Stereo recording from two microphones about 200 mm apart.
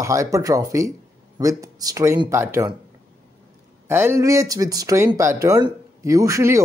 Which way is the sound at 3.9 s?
10° right (ahead or behind).